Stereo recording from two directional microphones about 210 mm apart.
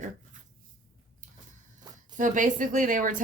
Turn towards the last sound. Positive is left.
turn(degrees=-40)  # may be behind; listen again after turning